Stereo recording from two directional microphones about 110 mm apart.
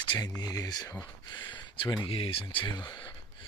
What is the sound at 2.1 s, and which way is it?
Speech, 60° left (ahead or behind).